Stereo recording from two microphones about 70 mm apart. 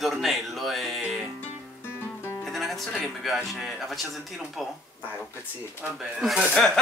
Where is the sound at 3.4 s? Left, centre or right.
Centre.